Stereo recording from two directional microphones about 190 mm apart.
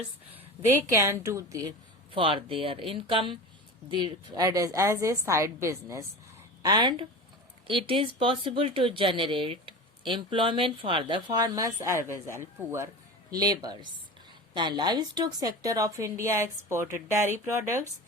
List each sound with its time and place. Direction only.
0.9 s a woman's voice: 15° right (ahead or behind)
2.1 s a woman's voice: 30° right (ahead or behind); by 17.7 s 10° right (ahead or behind)